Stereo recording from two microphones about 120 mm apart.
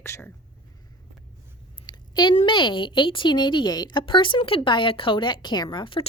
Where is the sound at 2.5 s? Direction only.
40° left (ahead or behind).